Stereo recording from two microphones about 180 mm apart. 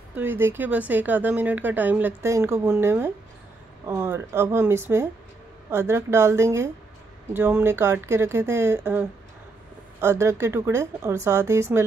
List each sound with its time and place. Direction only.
0.1 s speech: 10° right (ahead or behind)